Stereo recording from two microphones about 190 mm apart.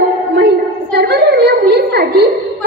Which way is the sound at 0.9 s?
55° right (ahead or behind).